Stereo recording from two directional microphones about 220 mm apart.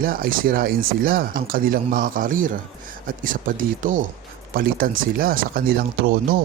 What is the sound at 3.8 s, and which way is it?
Speech, 40° right (ahead or behind).